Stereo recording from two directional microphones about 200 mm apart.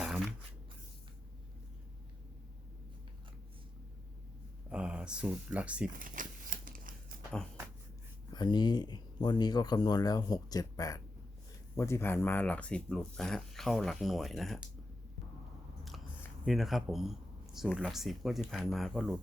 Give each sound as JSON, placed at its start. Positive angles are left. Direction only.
{"t": 4.7, "sound": "speech", "side_deg": -5}
{"t": 6.0, "sound": "scissors", "side_deg": -40}
{"t": 8.3, "sound": "speech", "side_deg": 20}
{"t": 16.5, "sound": "speech", "side_deg": 0}